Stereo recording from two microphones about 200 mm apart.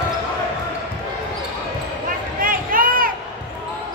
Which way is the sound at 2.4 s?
45° right (ahead or behind).